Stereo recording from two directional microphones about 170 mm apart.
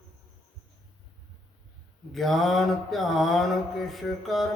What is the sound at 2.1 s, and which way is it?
Mantra, centre (ahead or behind).